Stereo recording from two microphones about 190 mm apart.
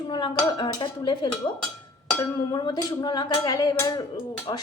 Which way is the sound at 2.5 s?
20° left (ahead or behind).